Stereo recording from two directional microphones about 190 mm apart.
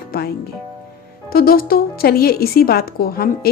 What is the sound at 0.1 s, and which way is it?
Speech, 50° left (ahead or behind).